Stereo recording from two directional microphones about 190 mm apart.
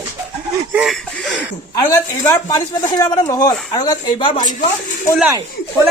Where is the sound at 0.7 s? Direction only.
5° right (ahead or behind).